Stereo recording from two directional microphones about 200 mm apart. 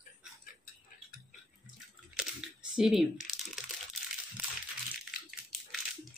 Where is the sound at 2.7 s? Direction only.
Centre (ahead or behind).